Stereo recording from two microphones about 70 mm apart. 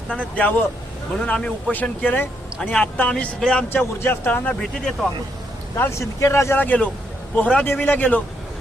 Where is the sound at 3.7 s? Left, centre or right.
Left.